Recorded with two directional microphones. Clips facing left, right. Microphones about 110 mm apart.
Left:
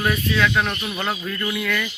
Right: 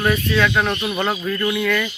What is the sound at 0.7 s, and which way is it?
Speech, 30° right (ahead or behind).